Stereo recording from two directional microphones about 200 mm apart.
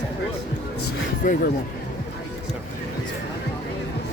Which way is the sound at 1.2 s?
40° left (ahead or behind).